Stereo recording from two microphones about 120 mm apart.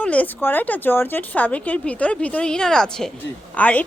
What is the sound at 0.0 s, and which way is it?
Speech, 10° left (ahead or behind).